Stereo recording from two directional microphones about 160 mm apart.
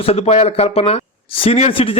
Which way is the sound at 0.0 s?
40° left (ahead or behind).